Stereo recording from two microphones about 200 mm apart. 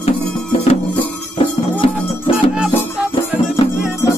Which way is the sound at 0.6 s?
30° left (ahead or behind).